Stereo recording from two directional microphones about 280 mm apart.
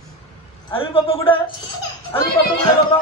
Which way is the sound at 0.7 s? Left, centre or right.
Centre.